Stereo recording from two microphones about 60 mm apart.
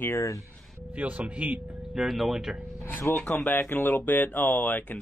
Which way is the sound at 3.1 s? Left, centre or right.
Left.